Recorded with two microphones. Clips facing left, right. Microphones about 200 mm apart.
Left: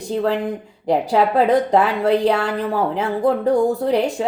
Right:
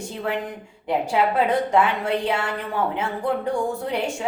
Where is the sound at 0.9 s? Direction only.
35° left (ahead or behind).